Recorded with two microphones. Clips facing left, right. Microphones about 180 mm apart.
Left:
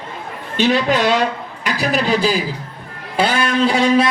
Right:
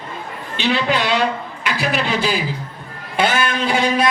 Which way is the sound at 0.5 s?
45° left (ahead or behind).